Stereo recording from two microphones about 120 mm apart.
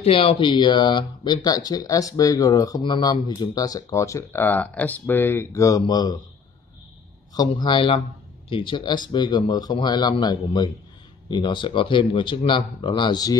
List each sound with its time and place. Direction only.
0.0 s speech: 50° left (ahead or behind); by 6.1 s 35° left (ahead or behind)
7.3 s speech: 40° left (ahead or behind)